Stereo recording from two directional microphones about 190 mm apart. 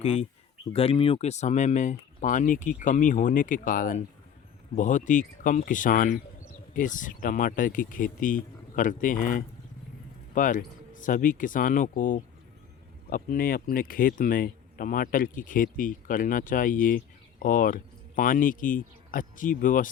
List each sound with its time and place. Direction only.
0.0 s speech: 30° left (ahead or behind)